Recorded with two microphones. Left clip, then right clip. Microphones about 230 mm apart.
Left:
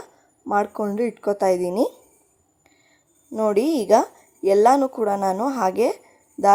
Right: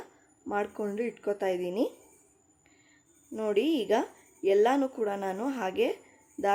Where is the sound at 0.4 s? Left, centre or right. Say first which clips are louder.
Left 10 dB; left.